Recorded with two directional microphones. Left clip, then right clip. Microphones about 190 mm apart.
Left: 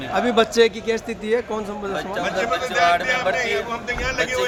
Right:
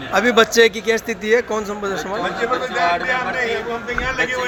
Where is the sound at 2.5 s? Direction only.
15° left (ahead or behind).